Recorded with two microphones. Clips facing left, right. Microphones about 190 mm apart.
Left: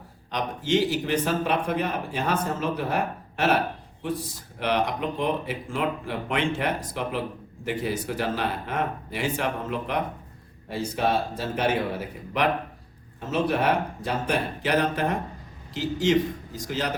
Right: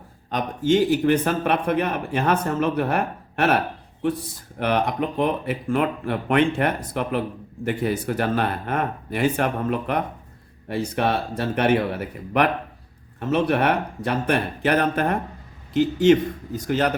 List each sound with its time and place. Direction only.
0.3 s speech: 50° right (ahead or behind)
4.6 s speech: 50° right (ahead or behind)